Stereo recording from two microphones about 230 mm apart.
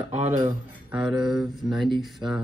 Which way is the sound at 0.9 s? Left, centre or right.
Centre.